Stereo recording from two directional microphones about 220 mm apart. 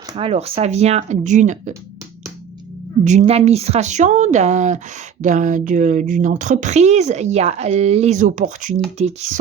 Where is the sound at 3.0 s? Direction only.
30° right (ahead or behind).